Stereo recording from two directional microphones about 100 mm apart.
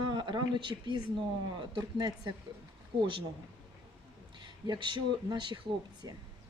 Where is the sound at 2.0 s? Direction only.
40° right (ahead or behind).